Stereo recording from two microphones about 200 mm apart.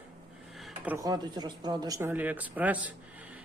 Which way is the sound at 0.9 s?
20° right (ahead or behind).